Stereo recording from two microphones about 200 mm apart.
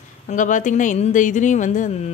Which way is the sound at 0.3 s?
40° left (ahead or behind).